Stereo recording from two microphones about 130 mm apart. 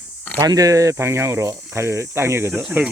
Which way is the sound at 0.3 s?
25° right (ahead or behind).